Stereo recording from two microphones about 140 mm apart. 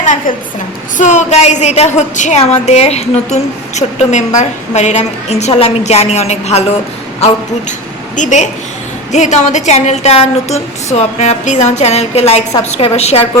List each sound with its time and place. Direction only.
0.0 s a woman's voice: 60° left (ahead or behind)
8.1 s a woman's voice: 60° left (ahead or behind)